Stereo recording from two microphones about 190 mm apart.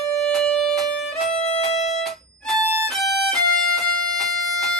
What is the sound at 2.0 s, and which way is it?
Music, centre (ahead or behind).